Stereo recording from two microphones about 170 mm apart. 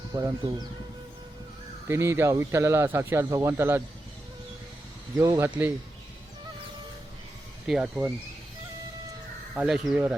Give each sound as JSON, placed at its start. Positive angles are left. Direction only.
{"t": 0.1, "sound": "speech", "side_deg": -20}
{"t": 1.9, "sound": "speech", "side_deg": -15}
{"t": 5.1, "sound": "speech", "side_deg": -15}
{"t": 7.7, "sound": "speech", "side_deg": -5}
{"t": 9.6, "sound": "speech", "side_deg": -5}